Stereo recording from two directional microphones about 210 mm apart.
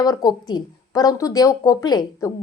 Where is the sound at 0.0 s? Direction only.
15° left (ahead or behind).